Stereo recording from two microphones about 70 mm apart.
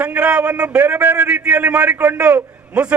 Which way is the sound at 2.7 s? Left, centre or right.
Centre.